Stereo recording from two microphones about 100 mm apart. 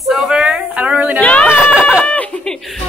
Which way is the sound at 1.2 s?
15° left (ahead or behind).